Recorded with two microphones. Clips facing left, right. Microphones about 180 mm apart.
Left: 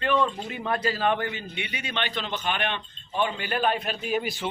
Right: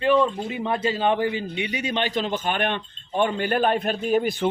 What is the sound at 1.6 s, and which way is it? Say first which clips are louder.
Speech: right 6 dB; 40° right (ahead or behind).